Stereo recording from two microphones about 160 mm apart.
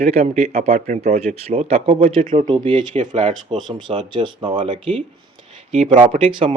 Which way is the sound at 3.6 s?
30° right (ahead or behind).